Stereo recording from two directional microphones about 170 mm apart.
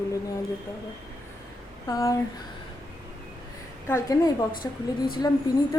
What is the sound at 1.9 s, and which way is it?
Speech, 20° left (ahead or behind).